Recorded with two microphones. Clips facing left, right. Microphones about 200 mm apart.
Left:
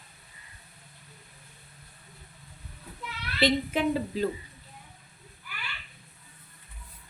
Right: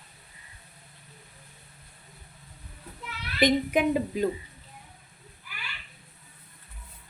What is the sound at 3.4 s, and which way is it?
Speech, 15° right (ahead or behind).